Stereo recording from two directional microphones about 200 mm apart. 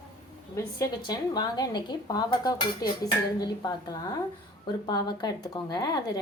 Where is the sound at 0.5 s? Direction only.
20° left (ahead or behind).